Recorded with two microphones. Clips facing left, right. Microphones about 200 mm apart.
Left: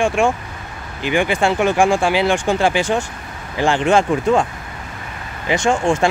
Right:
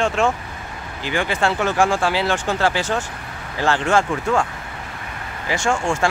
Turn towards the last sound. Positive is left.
turn(degrees=20)  # may be behind; listen again after turning